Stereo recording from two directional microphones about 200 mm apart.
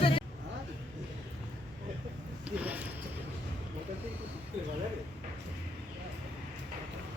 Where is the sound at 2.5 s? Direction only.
5° right (ahead or behind).